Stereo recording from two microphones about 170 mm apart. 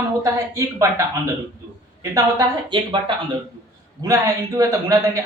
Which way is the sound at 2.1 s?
25° right (ahead or behind).